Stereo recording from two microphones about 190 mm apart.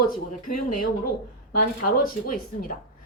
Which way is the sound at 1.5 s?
50° left (ahead or behind).